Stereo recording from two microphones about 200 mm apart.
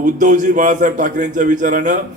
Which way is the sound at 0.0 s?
40° right (ahead or behind).